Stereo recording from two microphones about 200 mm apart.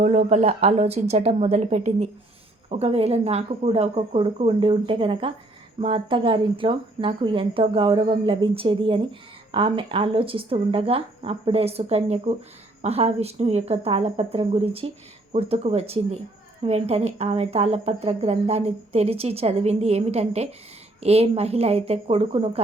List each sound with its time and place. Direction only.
0.0 s a woman's voice: 35° right (ahead or behind)